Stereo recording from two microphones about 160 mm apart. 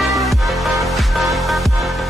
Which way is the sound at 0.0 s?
Centre (ahead or behind).